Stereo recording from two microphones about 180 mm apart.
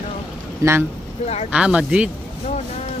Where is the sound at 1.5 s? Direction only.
5° right (ahead or behind).